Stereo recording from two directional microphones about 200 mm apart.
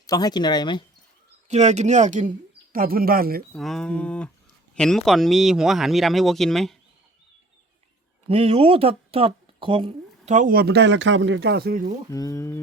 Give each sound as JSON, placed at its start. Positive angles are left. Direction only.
{"t": 0.1, "sound": "speech", "side_deg": 20}
{"t": 1.5, "sound": "speech", "side_deg": -35}
{"t": 3.5, "sound": "speech", "side_deg": 5}
{"t": 8.3, "sound": "speech", "side_deg": -30}
{"t": 12.1, "sound": "speech", "side_deg": 15}